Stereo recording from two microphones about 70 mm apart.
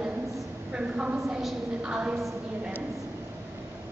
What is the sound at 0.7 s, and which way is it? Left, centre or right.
A woman's voice, centre.